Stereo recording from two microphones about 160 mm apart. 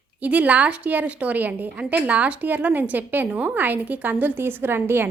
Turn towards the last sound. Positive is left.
turn(degrees=-15)  # may be behind; listen again after turning